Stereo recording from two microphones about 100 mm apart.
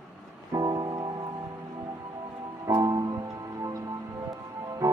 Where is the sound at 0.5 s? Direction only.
40° right (ahead or behind).